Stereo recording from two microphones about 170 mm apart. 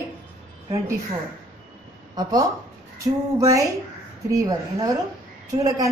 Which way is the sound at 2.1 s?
25° right (ahead or behind).